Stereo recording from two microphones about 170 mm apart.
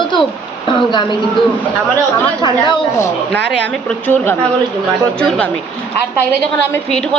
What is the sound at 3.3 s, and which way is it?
Speech, 90° right.